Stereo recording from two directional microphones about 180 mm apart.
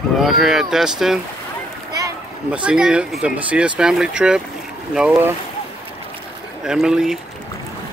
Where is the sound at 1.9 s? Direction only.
20° right (ahead or behind).